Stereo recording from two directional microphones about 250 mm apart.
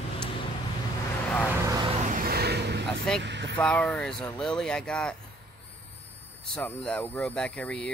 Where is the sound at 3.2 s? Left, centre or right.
Right.